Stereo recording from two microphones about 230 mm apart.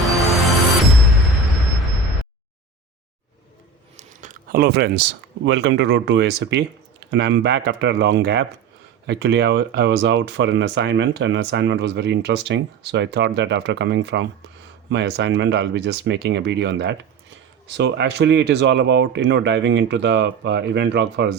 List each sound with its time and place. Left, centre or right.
0.2 s music: centre
3.9 s speech: right